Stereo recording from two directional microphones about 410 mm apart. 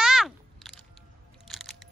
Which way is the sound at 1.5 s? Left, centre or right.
Centre.